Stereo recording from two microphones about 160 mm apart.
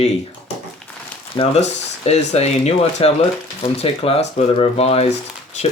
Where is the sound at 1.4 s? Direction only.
40° left (ahead or behind).